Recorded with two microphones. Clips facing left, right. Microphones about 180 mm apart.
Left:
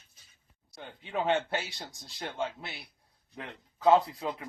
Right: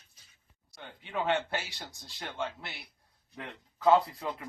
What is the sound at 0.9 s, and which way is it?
A man's voice, 20° left (ahead or behind).